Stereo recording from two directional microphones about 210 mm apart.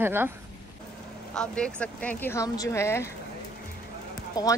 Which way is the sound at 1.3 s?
5° left (ahead or behind).